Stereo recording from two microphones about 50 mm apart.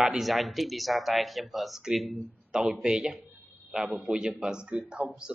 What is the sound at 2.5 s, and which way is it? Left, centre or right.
A man's voice, centre.